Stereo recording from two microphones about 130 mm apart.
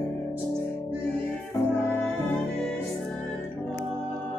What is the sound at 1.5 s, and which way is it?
Music, 15° left (ahead or behind).